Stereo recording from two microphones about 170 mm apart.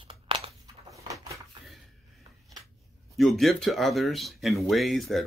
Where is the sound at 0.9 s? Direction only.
20° right (ahead or behind).